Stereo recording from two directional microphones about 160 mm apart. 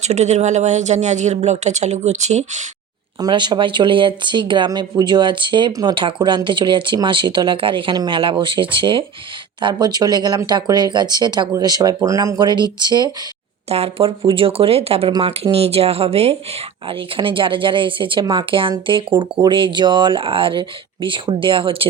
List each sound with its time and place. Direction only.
0.0 s speech: 45° right (ahead or behind)
3.2 s speech: 30° right (ahead or behind)
13.7 s speech: 40° right (ahead or behind)